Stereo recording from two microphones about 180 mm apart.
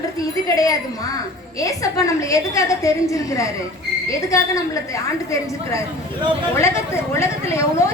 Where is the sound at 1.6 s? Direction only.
20° left (ahead or behind).